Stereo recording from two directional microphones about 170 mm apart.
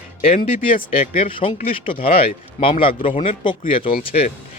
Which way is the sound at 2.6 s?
30° left (ahead or behind).